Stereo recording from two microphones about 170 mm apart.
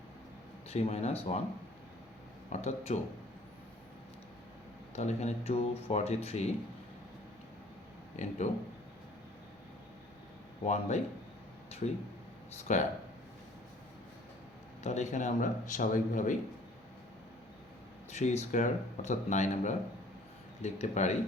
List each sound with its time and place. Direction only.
0.7 s speech: 40° left (ahead or behind)
2.5 s speech: 40° left (ahead or behind)
4.9 s speech: 40° left (ahead or behind)
8.1 s speech: 45° left (ahead or behind)
10.7 s speech: 40° left (ahead or behind)
12.7 s speech: 45° left (ahead or behind)
14.8 s speech: 45° left (ahead or behind)
18.1 s speech: 40° left (ahead or behind)